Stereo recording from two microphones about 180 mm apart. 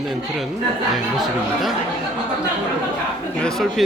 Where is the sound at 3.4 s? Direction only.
Centre (ahead or behind).